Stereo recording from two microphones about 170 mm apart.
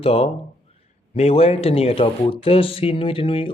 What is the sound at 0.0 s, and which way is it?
Speech, 35° left (ahead or behind).